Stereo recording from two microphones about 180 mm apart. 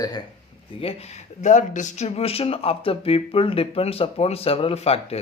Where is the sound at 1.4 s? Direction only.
45° left (ahead or behind).